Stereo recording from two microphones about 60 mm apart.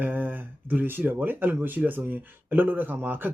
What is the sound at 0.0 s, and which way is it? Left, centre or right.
A man's voice, right.